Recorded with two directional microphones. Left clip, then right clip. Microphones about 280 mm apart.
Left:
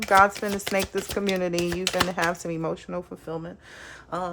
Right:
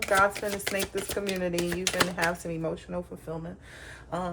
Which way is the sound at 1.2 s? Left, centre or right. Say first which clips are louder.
Left 5 dB; centre.